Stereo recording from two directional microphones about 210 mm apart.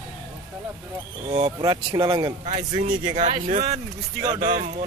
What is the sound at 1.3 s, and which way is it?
A man's voice, 25° right (ahead or behind).